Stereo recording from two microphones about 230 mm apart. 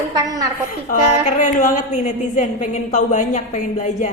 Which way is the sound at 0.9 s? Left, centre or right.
Left.